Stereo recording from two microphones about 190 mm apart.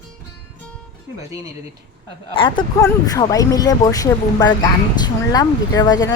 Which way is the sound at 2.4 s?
25° left (ahead or behind).